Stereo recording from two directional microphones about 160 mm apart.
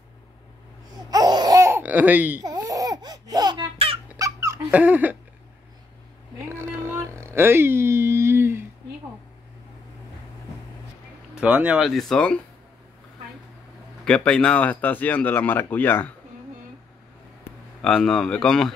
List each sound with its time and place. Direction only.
1.1 s laughter: 25° right (ahead or behind)
2.4 s laughter: 25° right (ahead or behind)
4.2 s a sound: 20° right (ahead or behind)
6.3 s a sound: 15° right (ahead or behind)
11.3 s speech: 10° right (ahead or behind)
11.9 s speech: centre (ahead or behind)
14.0 s speech: 5° left (ahead or behind)
17.8 s speech: 5° left (ahead or behind)